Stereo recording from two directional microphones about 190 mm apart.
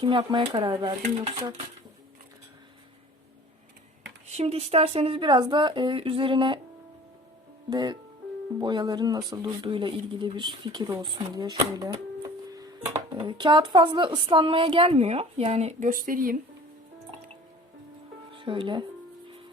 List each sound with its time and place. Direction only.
0.0 s a woman's voice: 25° right (ahead or behind)
4.3 s a woman's voice: 35° right (ahead or behind)
7.7 s a woman's voice: 20° right (ahead or behind)
13.1 s a woman's voice: 25° right (ahead or behind); by 16.4 s 45° right (ahead or behind)
18.3 s speech: 25° right (ahead or behind)